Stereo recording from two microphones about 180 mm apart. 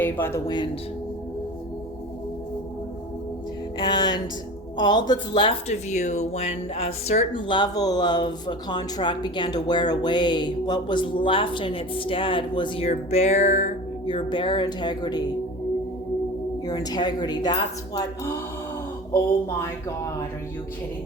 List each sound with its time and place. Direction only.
0.0 s speech: 10° left (ahead or behind)
3.8 s speech: 25° left (ahead or behind); by 13.7 s 40° left (ahead or behind)
14.1 s speech: 25° left (ahead or behind)
16.6 s speech: 20° left (ahead or behind)